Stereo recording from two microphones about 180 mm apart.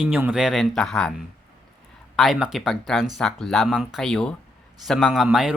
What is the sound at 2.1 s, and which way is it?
Speech, centre (ahead or behind).